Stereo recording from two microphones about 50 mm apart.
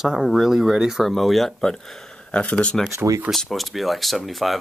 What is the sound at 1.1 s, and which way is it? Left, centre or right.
Speech, centre.